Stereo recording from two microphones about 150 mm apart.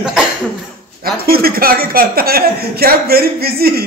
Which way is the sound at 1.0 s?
90° right.